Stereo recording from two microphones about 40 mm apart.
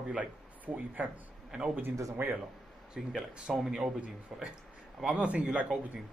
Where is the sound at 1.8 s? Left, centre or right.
Right.